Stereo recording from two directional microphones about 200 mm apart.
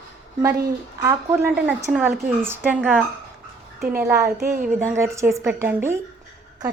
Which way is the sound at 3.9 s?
15° right (ahead or behind).